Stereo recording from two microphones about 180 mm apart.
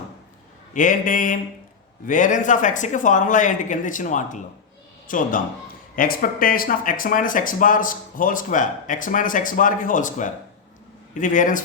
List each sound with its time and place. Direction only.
0.7 s speech: 45° left (ahead or behind)